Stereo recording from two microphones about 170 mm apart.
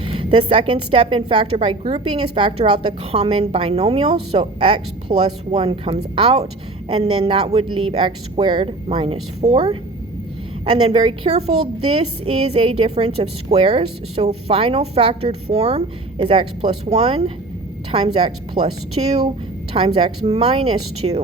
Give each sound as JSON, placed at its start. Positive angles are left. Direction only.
{"t": 0.0, "sound": "a woman's voice", "side_deg": -30}